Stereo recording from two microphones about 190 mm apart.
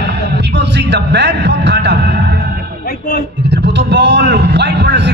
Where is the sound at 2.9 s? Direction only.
50° left (ahead or behind).